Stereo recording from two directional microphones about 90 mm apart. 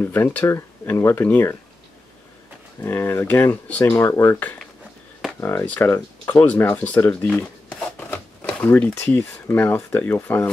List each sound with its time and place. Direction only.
0.0 s speech: 20° left (ahead or behind)
2.8 s speech: 25° left (ahead or behind)
3.9 s speech: 30° left (ahead or behind)